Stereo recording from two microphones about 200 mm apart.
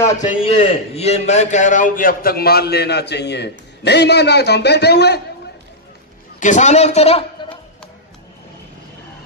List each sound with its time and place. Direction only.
0.2 s a man's voice: 30° left (ahead or behind); by 5.2 s 55° left (ahead or behind)
6.4 s a man's voice: 35° left (ahead or behind)